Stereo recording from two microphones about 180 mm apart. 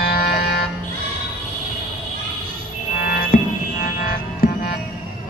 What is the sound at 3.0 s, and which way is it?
Music, 50° left (ahead or behind).